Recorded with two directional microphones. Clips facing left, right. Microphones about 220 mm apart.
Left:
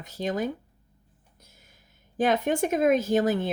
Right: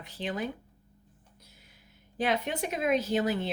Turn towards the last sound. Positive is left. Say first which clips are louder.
# left 5 dB
turn(degrees=50)  # may be behind; listen again after turning